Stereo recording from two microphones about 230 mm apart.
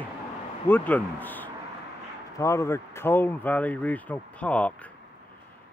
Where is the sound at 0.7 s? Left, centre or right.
Centre.